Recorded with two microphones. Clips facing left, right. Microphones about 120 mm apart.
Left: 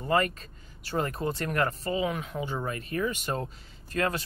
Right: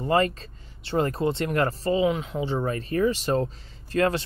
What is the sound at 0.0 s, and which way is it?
Speech, 30° right (ahead or behind).